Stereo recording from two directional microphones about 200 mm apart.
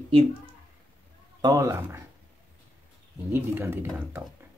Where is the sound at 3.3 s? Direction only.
10° right (ahead or behind).